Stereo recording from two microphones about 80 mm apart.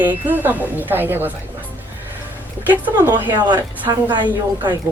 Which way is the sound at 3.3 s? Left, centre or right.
Right.